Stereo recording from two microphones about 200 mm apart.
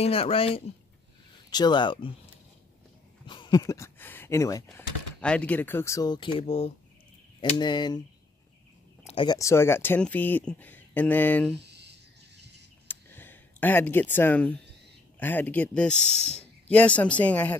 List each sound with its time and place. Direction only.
0.0 s speech: 30° left (ahead or behind)
3.3 s a sound: 25° left (ahead or behind)
4.6 s speech: 5° left (ahead or behind); by 8.0 s 20° left (ahead or behind)
9.0 s speech: 25° left (ahead or behind); by 11.5 s 10° left (ahead or behind)
11.5 s a sound: 60° right (ahead or behind)
12.8 s a sound: 10° left (ahead or behind)
15.1 s speech: 10° left (ahead or behind)
16.1 s speech: 30° right (ahead or behind)
16.6 s speech: 5° left (ahead or behind)